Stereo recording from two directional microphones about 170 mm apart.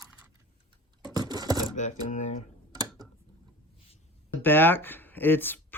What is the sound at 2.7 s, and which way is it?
Tick-tock, 20° right (ahead or behind).